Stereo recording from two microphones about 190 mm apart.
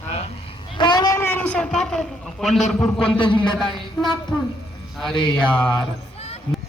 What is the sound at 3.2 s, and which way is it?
Speech, 25° left (ahead or behind).